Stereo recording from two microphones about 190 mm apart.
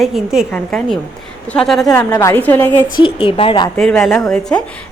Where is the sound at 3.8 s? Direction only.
Centre (ahead or behind).